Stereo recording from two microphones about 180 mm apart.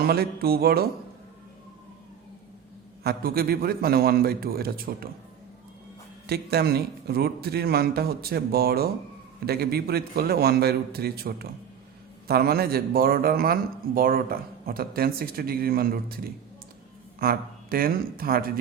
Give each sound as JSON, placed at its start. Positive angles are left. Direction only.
{"t": 0.0, "sound": "speech", "side_deg": -60}
{"t": 3.0, "sound": "speech", "side_deg": -60}
{"t": 6.2, "sound": "speech", "side_deg": -60}